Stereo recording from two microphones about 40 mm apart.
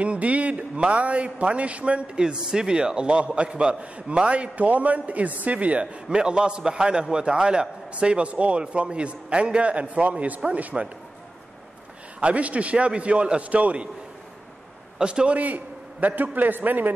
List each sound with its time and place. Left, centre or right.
0.0 s a man's voice: right
2.1 s a man's voice: centre; by 5.9 s right
6.0 s a man's voice: right
12.2 s a man's voice: right
15.0 s a man's voice: right
15.3 s a man's voice: right